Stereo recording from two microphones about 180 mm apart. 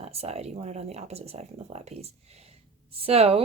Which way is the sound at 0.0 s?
35° right (ahead or behind).